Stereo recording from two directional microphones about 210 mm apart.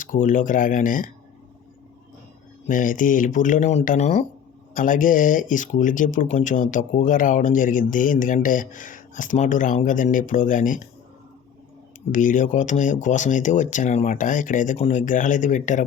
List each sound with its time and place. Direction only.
0.0 s speech: 40° left (ahead or behind)
2.6 s speech: 40° left (ahead or behind)
12.1 s speech: 40° left (ahead or behind)